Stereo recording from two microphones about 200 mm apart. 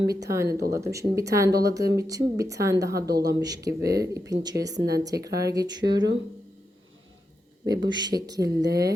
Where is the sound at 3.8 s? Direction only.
50° right (ahead or behind).